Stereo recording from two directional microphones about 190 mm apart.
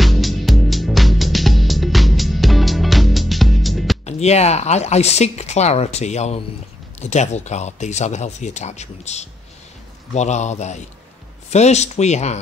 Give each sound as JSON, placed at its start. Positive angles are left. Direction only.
{"t": 0.0, "sound": "music", "side_deg": 0}
{"t": 4.0, "sound": "speech", "side_deg": 35}